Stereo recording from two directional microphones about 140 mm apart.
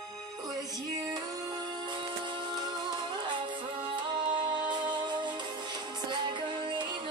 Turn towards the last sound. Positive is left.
turn(degrees=-35)  # may be behind; listen again after turning